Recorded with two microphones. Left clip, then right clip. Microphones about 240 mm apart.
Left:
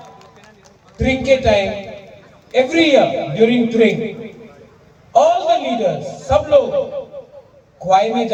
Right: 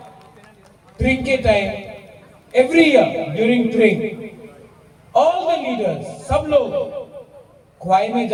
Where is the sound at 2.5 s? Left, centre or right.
Left.